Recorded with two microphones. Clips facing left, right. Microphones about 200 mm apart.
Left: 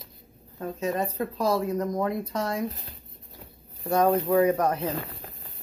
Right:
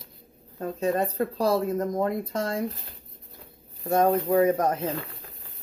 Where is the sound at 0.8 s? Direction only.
30° right (ahead or behind).